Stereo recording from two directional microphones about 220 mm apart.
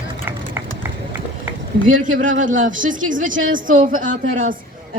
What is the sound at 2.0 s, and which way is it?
A man's voice, 35° right (ahead or behind).